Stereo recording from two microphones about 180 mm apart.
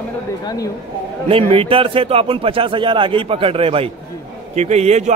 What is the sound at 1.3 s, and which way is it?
A man's voice, 30° right (ahead or behind).